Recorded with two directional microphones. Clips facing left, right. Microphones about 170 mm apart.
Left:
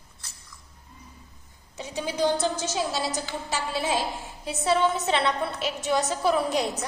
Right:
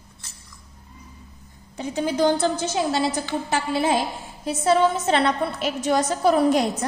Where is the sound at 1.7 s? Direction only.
55° right (ahead or behind).